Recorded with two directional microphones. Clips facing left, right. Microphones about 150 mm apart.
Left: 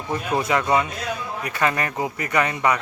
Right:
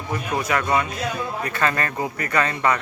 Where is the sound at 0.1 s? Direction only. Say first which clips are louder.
Left 2 dB; 25° left (ahead or behind).